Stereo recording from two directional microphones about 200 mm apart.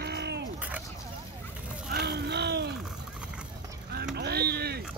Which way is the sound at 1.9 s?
55° right (ahead or behind).